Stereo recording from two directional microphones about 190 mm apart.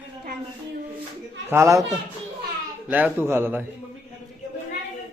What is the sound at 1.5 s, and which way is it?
Speech, 15° right (ahead or behind).